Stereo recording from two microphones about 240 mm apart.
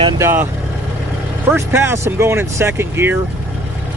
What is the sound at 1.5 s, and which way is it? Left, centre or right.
Speech, centre.